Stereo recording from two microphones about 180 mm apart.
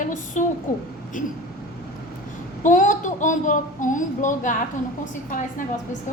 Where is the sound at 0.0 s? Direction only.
45° left (ahead or behind).